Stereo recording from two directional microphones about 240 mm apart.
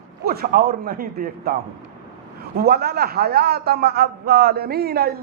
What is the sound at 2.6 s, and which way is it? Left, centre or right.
A man's voice, right.